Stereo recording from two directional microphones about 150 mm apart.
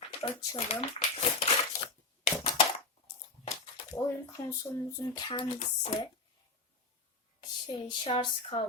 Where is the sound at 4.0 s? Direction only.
10° left (ahead or behind).